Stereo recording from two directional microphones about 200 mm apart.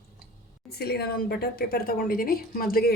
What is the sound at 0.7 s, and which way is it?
A woman's voice, 55° left (ahead or behind).